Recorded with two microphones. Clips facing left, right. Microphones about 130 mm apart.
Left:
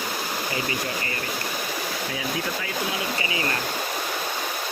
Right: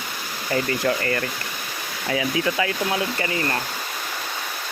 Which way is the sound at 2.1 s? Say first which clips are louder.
Right 10 dB; 90° right.